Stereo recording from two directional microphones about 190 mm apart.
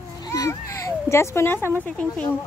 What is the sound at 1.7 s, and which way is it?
Speech, 5° left (ahead or behind).